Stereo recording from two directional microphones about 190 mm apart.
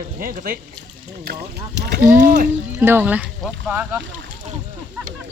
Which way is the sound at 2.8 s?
10° right (ahead or behind).